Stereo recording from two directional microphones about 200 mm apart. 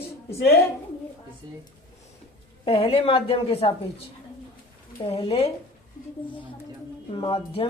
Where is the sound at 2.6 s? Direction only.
30° left (ahead or behind).